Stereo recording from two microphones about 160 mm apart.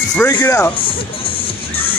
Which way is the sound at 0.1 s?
15° left (ahead or behind).